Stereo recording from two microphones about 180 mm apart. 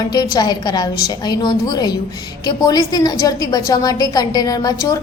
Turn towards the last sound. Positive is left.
turn(degrees=20)  # may be behind; listen again after turning